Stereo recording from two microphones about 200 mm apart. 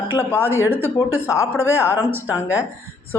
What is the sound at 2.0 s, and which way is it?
Speech, 10° right (ahead or behind).